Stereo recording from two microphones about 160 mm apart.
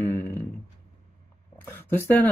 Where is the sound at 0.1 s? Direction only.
15° left (ahead or behind).